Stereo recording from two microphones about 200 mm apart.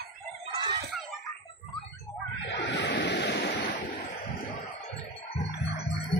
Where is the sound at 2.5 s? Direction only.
60° left (ahead or behind).